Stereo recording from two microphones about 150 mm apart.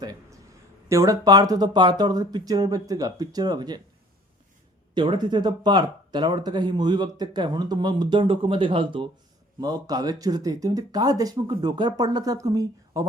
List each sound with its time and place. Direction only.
0.0 s a sound: 25° right (ahead or behind)
0.9 s speech: 20° right (ahead or behind)
4.9 s speech: 30° right (ahead or behind)